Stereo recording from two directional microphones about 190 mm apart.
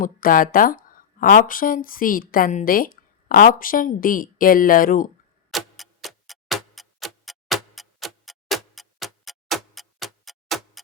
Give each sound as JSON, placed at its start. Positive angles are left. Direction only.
{"t": 0.0, "sound": "speech", "side_deg": 45}
{"t": 5.5, "sound": "tick-tock", "side_deg": 0}